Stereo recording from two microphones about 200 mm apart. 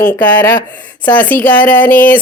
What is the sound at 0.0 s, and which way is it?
Speech, 10° left (ahead or behind).